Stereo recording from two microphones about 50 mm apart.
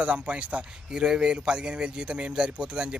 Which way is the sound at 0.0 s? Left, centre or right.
Right.